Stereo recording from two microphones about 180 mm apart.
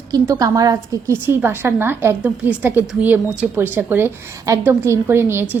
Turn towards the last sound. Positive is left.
turn(degrees=-15)  # may be behind; listen again after turning